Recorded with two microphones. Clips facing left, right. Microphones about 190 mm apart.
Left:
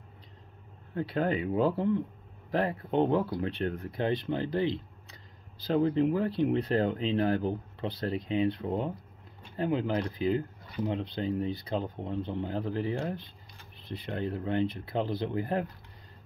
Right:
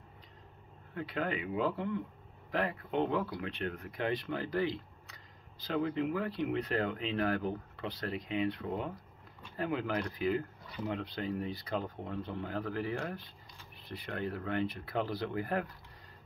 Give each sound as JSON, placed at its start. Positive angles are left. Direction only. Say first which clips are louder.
{"t": 0.9, "sound": "speech", "louder": "left 6 dB", "side_deg": 35}